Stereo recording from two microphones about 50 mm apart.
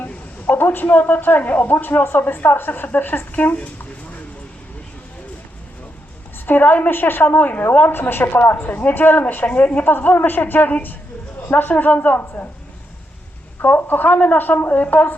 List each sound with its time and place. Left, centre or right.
0.4 s a man's voice: left
6.4 s a woman's voice: left
8.5 s a man's voice: left
13.6 s a man's voice: left